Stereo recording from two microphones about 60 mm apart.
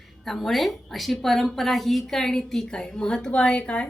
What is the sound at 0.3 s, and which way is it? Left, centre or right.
A woman's voice, centre.